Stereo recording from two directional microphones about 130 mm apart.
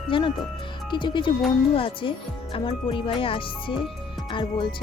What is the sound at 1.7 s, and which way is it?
Speech, 45° left (ahead or behind).